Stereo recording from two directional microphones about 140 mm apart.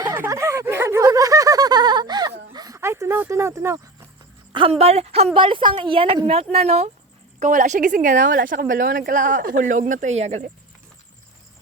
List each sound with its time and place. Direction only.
0.1 s snicker: 20° right (ahead or behind)
2.5 s a sound: 25° right (ahead or behind)
4.5 s a woman's voice: 40° right (ahead or behind)
7.3 s speech: 65° right (ahead or behind)
9.8 s speech: 60° right (ahead or behind)